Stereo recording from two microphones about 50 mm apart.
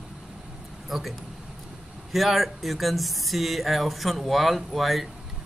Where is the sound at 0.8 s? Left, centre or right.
Centre.